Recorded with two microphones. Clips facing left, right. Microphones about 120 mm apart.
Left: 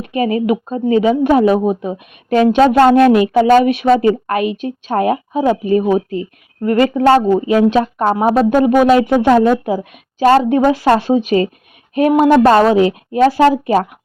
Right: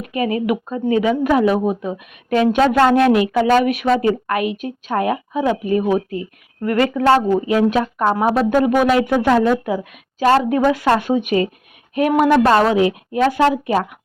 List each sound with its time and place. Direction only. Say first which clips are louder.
0.0 s a woman's voice: left 4 dB; 30° left (ahead or behind)